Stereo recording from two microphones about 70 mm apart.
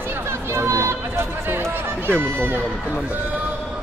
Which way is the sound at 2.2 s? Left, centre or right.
Right.